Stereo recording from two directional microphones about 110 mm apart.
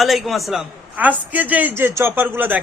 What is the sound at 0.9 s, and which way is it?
A man's voice, 15° right (ahead or behind).